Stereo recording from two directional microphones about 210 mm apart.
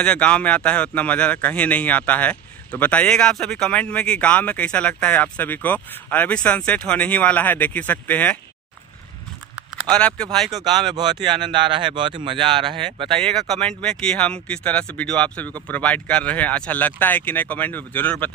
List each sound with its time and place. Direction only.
0.0 s a man's voice: 5° left (ahead or behind)
9.6 s speech: centre (ahead or behind)
10.5 s speech: 20° right (ahead or behind)
13.1 s a man's voice: 5° left (ahead or behind)